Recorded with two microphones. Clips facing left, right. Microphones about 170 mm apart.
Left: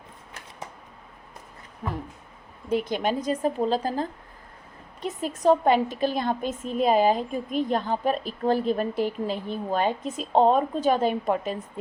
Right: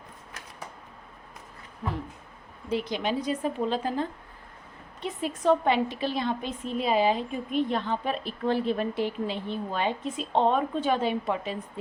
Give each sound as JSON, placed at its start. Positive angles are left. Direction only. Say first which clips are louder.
{"t": 2.6, "sound": "a woman's voice", "louder": "left 3 dB", "side_deg": 50}